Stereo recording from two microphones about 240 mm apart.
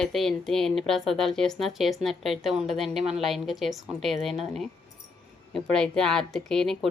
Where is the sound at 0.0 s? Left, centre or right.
Centre.